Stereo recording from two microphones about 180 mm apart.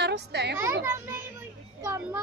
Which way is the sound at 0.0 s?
65° right (ahead or behind).